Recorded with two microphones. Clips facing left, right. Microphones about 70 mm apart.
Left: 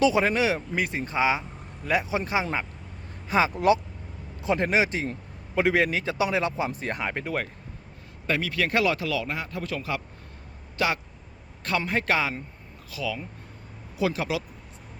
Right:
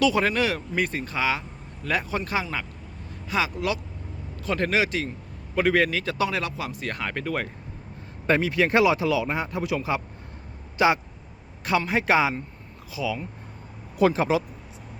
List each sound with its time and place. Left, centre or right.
0.0 s speech: centre; by 3.8 s left
4.4 s speech: centre
5.5 s speech: centre
8.3 s speech: right
14.1 s speech: right